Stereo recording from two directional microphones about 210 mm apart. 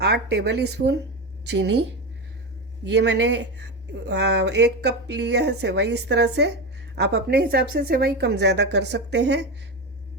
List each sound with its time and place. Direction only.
0.0 s speech: 50° right (ahead or behind)
2.8 s speech: 55° right (ahead or behind)